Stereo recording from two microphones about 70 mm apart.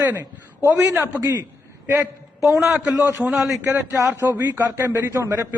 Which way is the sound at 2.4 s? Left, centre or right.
Centre.